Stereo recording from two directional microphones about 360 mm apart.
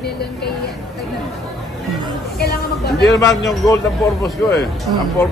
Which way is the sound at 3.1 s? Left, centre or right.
Centre.